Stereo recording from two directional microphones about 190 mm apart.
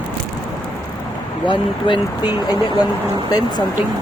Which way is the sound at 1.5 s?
25° left (ahead or behind).